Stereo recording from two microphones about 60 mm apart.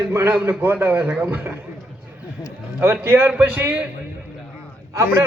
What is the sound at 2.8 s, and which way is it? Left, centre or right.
Speech, right.